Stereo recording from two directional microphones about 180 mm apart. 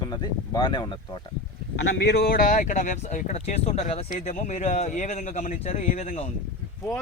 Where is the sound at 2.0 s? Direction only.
60° left (ahead or behind); by 6.3 s 45° left (ahead or behind).